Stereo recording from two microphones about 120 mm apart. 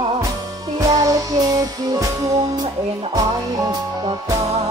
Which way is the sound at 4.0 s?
35° right (ahead or behind).